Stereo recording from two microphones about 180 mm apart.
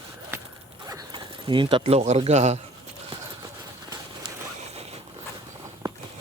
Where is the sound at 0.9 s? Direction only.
20° right (ahead or behind); by 2.6 s 40° right (ahead or behind).